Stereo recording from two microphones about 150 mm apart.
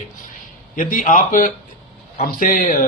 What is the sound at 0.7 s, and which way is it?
A man's voice, 70° left (ahead or behind).